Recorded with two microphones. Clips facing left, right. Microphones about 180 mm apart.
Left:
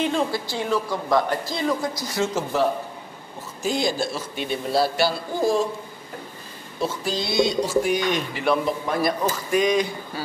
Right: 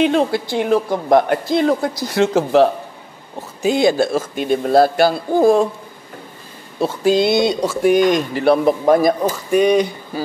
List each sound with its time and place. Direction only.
0.0 s speech: 65° right (ahead or behind)
6.8 s speech: 65° right (ahead or behind); by 9.0 s 45° right (ahead or behind)
9.6 s speech: 60° right (ahead or behind)